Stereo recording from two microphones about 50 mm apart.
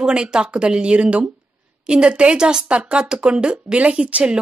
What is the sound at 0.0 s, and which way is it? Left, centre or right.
Speech, centre.